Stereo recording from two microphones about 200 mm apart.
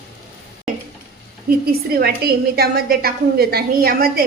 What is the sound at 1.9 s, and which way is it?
A woman's voice, 55° right (ahead or behind).